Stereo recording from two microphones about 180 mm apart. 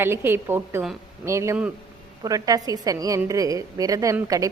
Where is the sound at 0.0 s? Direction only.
15° right (ahead or behind).